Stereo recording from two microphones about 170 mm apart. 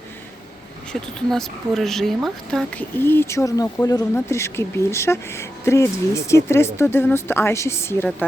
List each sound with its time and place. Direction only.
1.3 s speech: centre (ahead or behind)